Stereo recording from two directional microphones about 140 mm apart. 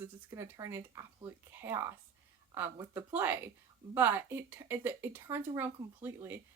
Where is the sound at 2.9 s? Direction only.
15° right (ahead or behind).